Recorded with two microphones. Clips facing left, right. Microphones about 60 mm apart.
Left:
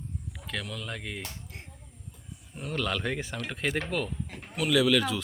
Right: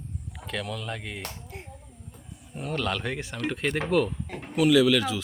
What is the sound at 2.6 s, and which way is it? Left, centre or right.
Speech, centre.